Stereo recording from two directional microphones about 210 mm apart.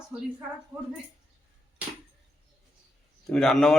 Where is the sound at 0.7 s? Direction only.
20° right (ahead or behind).